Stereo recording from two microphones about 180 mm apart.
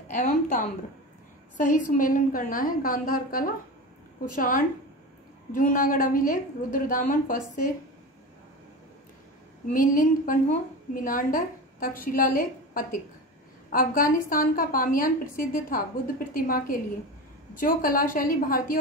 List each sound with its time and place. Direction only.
0.1 s a woman's voice: 45° left (ahead or behind)
9.7 s a woman's voice: 50° left (ahead or behind)